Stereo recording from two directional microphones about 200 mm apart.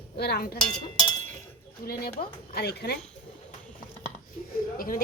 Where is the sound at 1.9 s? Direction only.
50° left (ahead or behind).